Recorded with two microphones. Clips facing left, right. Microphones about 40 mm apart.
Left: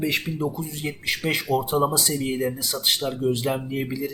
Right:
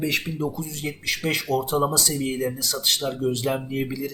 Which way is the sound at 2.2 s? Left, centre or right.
Centre.